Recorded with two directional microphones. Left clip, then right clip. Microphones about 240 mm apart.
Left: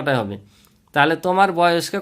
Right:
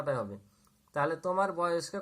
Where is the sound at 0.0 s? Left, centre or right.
Left.